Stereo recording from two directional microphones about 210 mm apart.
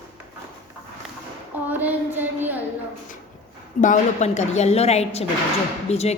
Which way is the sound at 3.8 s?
35° left (ahead or behind).